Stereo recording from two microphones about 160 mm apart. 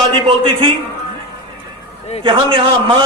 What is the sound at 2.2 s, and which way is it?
Speech, 30° right (ahead or behind).